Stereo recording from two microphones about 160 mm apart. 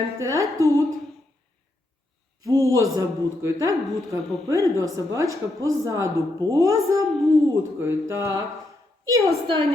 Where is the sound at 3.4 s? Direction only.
20° right (ahead or behind).